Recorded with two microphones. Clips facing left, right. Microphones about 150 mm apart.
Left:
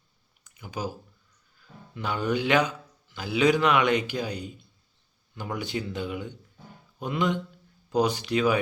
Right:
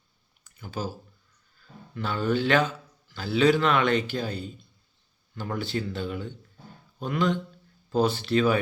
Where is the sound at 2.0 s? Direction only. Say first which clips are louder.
Right 1 dB; 15° left (ahead or behind).